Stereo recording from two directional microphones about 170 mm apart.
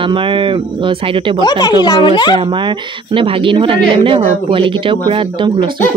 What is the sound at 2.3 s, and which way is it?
A woman's voice, 30° right (ahead or behind).